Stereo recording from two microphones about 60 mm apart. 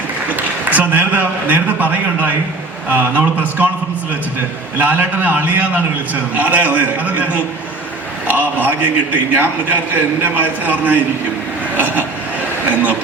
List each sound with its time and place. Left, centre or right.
0.6 s a man's voice: right
4.8 s a man's voice: right
12.6 s a man's voice: right